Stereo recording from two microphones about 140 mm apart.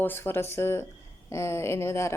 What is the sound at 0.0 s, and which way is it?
A woman's voice, 15° left (ahead or behind).